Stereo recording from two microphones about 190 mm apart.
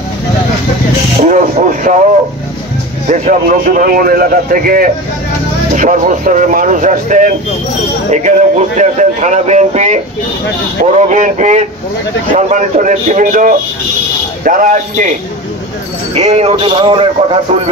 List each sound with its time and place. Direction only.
1.2 s a man's voice: 40° right (ahead or behind)
3.1 s a man's voice: 45° right (ahead or behind)
16.2 s speech: 35° right (ahead or behind)